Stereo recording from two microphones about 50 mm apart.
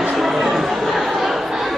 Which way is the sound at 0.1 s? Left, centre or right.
Centre.